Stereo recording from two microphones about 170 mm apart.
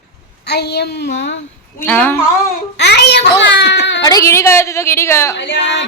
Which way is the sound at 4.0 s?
20° left (ahead or behind).